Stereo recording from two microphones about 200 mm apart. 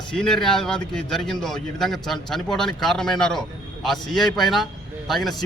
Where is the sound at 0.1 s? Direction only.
5° left (ahead or behind).